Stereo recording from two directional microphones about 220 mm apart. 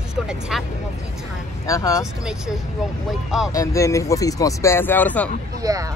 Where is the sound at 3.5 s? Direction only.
15° left (ahead or behind).